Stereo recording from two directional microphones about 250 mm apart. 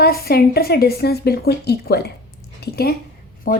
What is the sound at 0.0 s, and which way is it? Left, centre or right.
A woman's voice, left.